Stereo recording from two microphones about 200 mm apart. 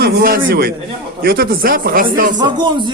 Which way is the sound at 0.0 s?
50° right (ahead or behind).